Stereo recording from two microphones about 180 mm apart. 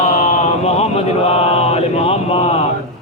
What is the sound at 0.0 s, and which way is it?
Mantra, 40° left (ahead or behind).